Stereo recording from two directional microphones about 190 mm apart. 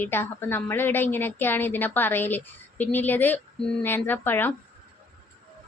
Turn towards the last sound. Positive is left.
turn(degrees=10)  # may be behind; listen again after turning